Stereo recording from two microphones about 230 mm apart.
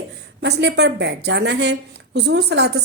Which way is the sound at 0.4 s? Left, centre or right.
Right.